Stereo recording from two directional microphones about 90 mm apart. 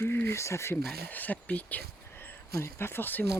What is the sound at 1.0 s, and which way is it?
Speech, 20° left (ahead or behind).